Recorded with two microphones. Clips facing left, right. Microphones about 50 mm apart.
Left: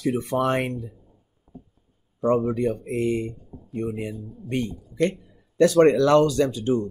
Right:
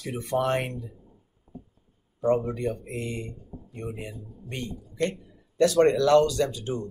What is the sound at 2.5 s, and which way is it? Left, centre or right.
Speech, left.